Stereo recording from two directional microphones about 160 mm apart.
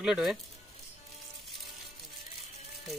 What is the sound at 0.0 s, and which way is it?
Speech, 5° right (ahead or behind).